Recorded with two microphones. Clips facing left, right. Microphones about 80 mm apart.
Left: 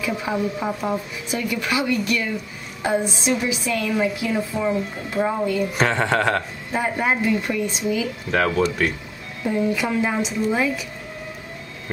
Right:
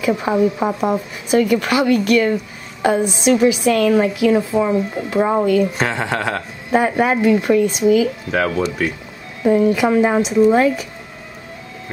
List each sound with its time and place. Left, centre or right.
0.0 s a woman's voice: right
5.8 s speech: centre
6.7 s a woman's voice: right
8.5 s speech: centre
9.5 s a woman's voice: right